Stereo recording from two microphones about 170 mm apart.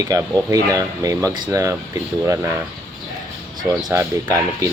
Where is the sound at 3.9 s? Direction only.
15° right (ahead or behind).